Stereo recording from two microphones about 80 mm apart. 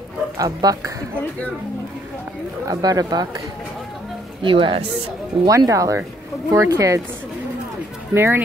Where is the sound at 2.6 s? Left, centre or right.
Right.